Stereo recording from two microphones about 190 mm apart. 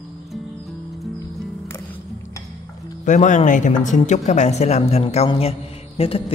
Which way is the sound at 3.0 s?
40° left (ahead or behind).